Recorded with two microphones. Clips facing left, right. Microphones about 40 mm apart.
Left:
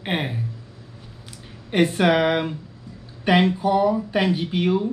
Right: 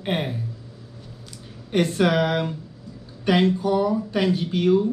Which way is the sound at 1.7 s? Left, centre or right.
Centre.